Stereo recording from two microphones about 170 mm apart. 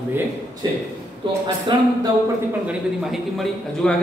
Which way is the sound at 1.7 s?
30° right (ahead or behind).